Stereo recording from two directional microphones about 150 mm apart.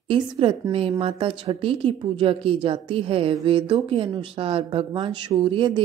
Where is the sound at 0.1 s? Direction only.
35° right (ahead or behind).